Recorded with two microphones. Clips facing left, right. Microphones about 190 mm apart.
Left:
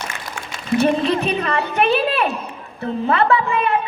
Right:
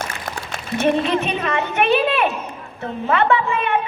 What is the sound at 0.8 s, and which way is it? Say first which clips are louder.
A woman's voice: even; 35° left (ahead or behind).